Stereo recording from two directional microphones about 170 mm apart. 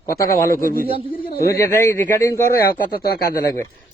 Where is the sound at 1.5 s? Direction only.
15° left (ahead or behind).